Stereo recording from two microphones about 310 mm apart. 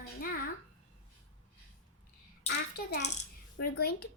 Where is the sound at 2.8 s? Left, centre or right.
Left.